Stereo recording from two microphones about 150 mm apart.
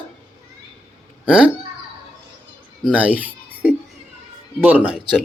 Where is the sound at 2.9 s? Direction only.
10° right (ahead or behind).